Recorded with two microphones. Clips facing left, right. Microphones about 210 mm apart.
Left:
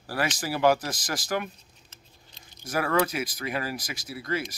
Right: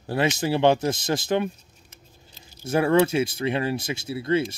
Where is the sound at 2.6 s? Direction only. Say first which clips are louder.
Right 6 dB; 25° right (ahead or behind).